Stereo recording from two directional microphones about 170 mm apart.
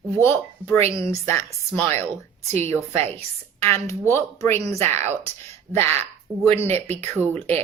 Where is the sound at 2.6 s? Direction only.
40° right (ahead or behind).